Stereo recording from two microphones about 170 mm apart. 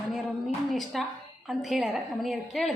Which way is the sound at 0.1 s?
Centre (ahead or behind).